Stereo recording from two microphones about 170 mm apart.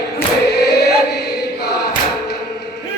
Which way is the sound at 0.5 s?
80° left.